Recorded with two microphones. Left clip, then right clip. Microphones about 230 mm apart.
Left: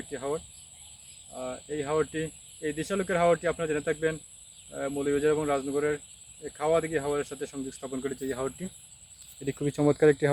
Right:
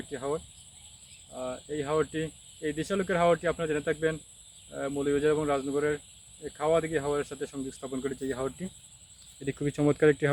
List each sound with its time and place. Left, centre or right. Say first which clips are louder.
0.1 s speech: even; centre
9.4 s speech: left 1 dB; centre